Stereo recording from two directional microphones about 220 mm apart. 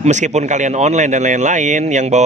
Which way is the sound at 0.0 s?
30° right (ahead or behind).